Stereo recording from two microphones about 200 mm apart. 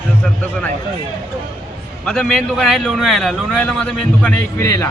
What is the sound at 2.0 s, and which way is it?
A man's voice, centre (ahead or behind).